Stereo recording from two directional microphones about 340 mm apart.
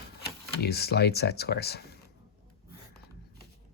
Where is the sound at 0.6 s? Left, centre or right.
Left.